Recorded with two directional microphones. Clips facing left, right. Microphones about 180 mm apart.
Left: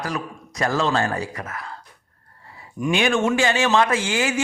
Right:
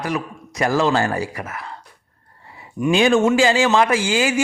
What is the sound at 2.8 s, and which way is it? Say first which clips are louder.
Speech: right 4 dB; 5° right (ahead or behind).